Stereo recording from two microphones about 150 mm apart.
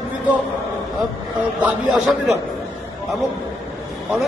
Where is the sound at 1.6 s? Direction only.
10° right (ahead or behind).